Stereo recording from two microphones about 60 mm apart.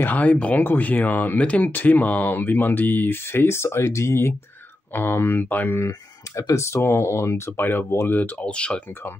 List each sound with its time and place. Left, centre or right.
0.0 s speech: left
4.9 s speech: left
5.9 s speech: left
8.5 s speech: centre